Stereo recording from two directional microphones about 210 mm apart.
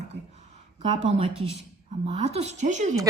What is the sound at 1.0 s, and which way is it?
A woman's voice, 30° right (ahead or behind).